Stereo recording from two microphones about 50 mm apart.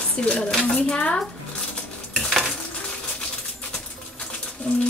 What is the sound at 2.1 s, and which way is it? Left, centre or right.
Stir, centre.